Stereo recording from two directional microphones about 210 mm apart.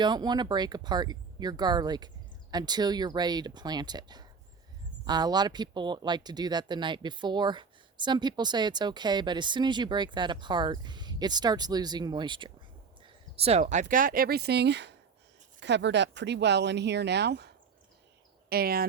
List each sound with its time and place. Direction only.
0.0 s speech: 20° right (ahead or behind); by 18.9 s 45° right (ahead or behind)